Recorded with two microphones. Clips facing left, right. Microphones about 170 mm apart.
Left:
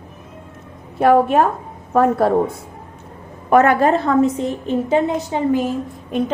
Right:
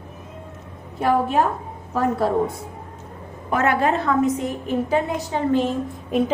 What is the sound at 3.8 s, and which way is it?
A woman's voice, 30° left (ahead or behind).